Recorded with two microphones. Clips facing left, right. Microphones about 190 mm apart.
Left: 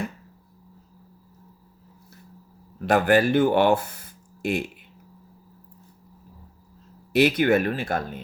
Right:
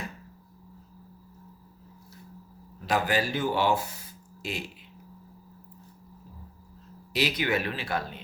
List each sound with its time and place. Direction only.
2.8 s speech: 55° left (ahead or behind)
7.1 s speech: 55° left (ahead or behind)